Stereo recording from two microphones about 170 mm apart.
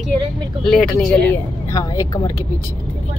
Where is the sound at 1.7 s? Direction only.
20° left (ahead or behind).